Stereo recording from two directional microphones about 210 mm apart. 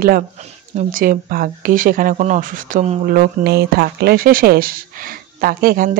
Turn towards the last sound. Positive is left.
turn(degrees=-45)  # may be behind; listen again after turning